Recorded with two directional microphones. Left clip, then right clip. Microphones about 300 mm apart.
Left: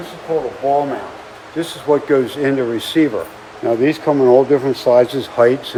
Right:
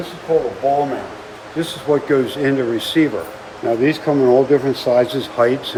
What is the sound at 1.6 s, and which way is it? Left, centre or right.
Speech, left.